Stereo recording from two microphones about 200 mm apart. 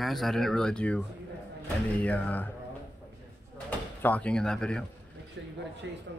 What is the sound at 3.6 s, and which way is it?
Speech, 5° left (ahead or behind).